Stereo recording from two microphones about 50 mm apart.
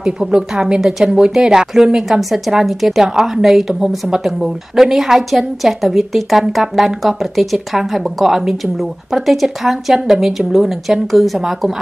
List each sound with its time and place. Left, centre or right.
0.0 s a woman's voice: centre
0.7 s a woman's voice: centre